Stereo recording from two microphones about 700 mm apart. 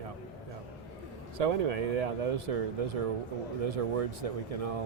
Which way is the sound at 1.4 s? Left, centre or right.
Right.